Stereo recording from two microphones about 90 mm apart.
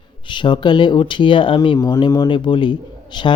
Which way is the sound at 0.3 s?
60° left (ahead or behind).